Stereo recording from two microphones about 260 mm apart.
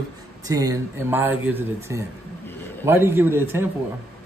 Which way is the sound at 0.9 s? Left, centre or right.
Centre.